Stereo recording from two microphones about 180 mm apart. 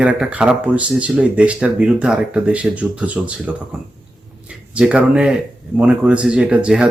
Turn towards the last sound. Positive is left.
turn(degrees=-5)  # may be behind; listen again after turning